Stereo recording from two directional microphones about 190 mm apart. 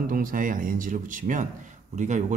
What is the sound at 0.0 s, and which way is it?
Speech, 45° right (ahead or behind).